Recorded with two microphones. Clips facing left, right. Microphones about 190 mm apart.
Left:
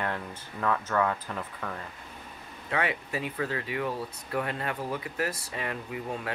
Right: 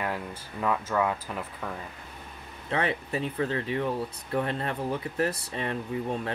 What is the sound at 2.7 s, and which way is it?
Speech, 30° right (ahead or behind).